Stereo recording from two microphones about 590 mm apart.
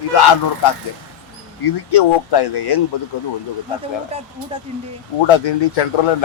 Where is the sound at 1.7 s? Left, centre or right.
Left.